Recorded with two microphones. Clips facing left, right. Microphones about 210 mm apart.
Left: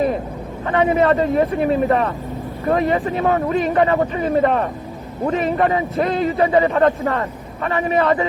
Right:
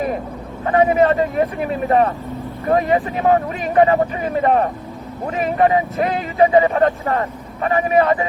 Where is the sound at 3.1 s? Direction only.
35° left (ahead or behind).